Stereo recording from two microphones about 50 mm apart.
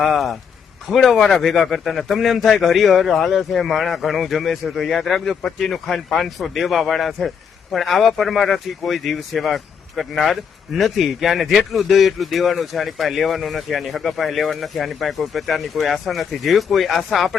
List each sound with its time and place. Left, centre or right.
0.0 s speech: centre